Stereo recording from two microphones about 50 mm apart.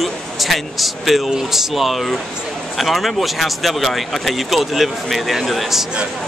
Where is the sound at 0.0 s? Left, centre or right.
Centre.